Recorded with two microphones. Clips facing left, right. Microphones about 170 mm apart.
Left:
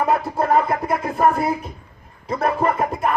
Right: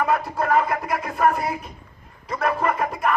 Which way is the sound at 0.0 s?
30° left (ahead or behind).